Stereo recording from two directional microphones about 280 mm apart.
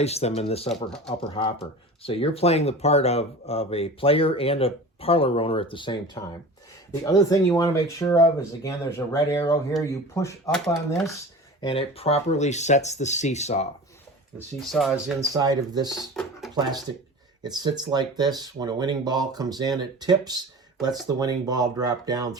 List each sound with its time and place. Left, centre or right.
0.0 s speech: left
14.6 s speech: centre
15.3 s speech: centre
16.0 s speech: centre
17.4 s speech: centre